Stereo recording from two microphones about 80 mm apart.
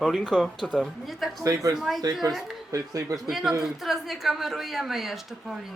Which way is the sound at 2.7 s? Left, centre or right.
Right.